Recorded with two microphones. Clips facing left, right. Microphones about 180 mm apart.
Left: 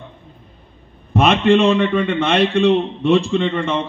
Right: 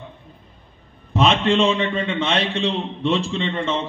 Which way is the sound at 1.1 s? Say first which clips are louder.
Left 4 dB; 60° left (ahead or behind).